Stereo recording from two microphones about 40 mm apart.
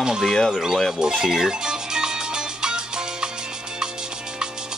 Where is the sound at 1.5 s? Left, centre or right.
Centre.